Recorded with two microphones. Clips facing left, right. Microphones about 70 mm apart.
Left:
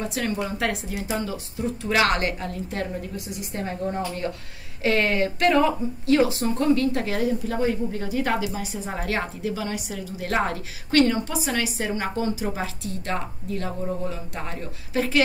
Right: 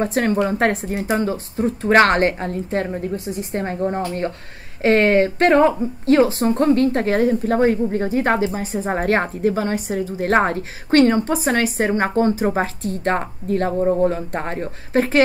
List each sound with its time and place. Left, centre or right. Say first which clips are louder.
0.0 s a woman's voice: right 8 dB; right